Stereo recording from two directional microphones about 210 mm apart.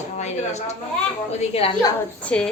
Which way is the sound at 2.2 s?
5° left (ahead or behind).